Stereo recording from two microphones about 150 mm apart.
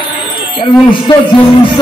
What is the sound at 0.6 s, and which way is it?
A man's voice, 35° left (ahead or behind).